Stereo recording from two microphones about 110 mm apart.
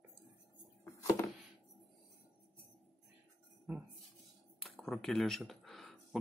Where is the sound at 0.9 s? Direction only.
25° left (ahead or behind).